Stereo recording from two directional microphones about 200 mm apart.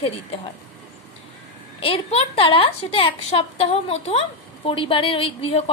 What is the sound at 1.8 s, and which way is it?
A woman's voice, 30° left (ahead or behind).